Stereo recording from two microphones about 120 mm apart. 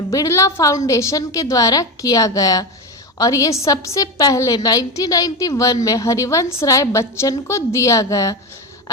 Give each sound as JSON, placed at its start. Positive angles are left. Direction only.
{"t": 0.1, "sound": "a woman's voice", "side_deg": 25}